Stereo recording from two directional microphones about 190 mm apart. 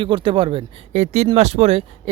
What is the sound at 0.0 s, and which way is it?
Speech, 25° right (ahead or behind).